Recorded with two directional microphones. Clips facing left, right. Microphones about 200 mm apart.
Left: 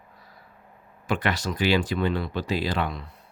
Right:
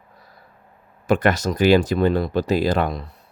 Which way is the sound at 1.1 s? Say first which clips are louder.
Right 8 dB; 45° right (ahead or behind).